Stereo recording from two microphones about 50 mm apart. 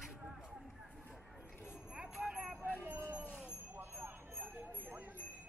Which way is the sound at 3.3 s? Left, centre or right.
Left.